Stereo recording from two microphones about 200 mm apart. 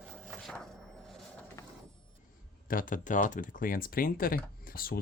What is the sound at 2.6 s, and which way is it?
Speech, 45° left (ahead or behind).